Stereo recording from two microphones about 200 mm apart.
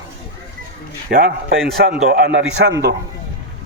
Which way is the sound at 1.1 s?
45° right (ahead or behind).